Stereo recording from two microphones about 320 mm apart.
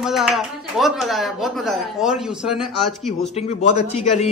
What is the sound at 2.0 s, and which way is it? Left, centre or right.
Speech, centre.